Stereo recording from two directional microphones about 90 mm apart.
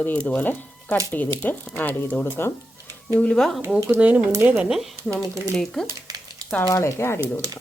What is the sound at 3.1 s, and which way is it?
Speech, 15° left (ahead or behind).